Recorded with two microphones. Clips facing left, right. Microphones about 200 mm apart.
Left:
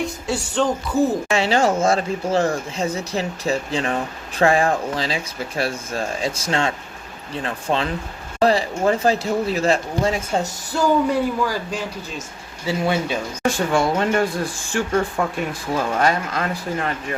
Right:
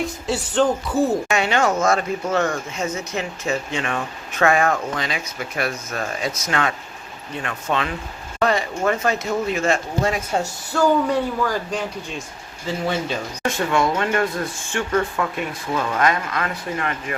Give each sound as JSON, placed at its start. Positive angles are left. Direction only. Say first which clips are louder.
{"t": 0.0, "sound": "speech", "louder": "even", "side_deg": 0}
{"t": 1.3, "sound": "speech", "louder": "left 2 dB", "side_deg": 30}
{"t": 11.1, "sound": "a man's voice", "louder": "left 1 dB", "side_deg": 10}
{"t": 13.4, "sound": "speech", "louder": "left 1 dB", "side_deg": 30}